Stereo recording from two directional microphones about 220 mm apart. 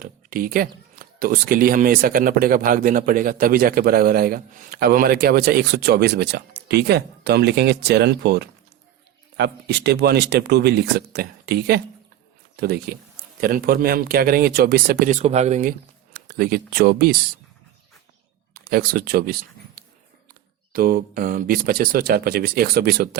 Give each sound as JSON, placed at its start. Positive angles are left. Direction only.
{"t": 0.0, "sound": "a sound", "side_deg": -40}
{"t": 0.9, "sound": "speech", "side_deg": -40}
{"t": 16.1, "sound": "speech", "side_deg": -40}
{"t": 18.5, "sound": "speech", "side_deg": -45}